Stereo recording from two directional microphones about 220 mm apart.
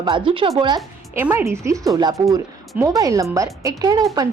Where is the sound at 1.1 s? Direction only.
10° right (ahead or behind).